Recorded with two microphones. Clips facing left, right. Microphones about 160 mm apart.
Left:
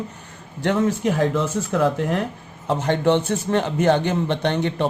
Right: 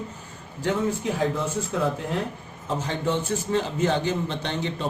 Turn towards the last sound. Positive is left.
turn(degrees=65)  # may be behind; listen again after turning